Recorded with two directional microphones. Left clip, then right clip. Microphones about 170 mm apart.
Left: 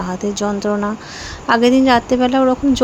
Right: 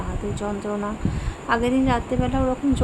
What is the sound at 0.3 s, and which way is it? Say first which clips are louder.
A woman's voice: left 8 dB; 40° left (ahead or behind).